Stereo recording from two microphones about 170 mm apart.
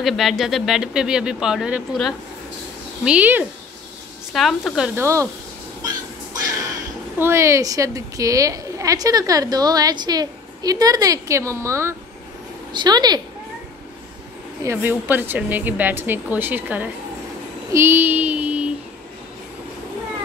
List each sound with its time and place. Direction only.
0.0 s speech: centre (ahead or behind)
5.0 s speech: 15° right (ahead or behind)
7.2 s a woman's voice: 15° right (ahead or behind)
14.6 s speech: 15° right (ahead or behind)